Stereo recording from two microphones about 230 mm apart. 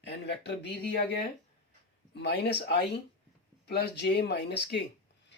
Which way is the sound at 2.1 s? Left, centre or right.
Left.